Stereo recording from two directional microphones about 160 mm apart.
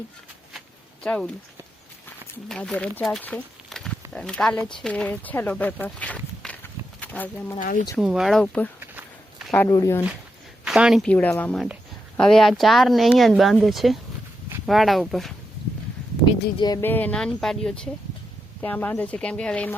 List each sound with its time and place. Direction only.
1.0 s speech: 5° left (ahead or behind)
2.5 s speech: 5° left (ahead or behind)
7.6 s speech: 55° left (ahead or behind)
7.9 s speech: centre (ahead or behind)
9.5 s speech: 20° left (ahead or behind)
10.6 s speech: 5° right (ahead or behind)
16.6 s speech: 25° left (ahead or behind)
16.8 s speech: 10° left (ahead or behind)